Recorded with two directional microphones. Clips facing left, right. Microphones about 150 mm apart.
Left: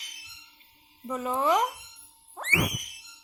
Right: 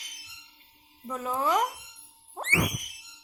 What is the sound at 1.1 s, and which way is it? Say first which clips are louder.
Speech: left 2 dB; centre (ahead or behind).